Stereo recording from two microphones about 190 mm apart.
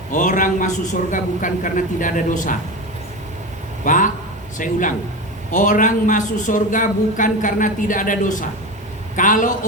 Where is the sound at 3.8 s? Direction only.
45° left (ahead or behind).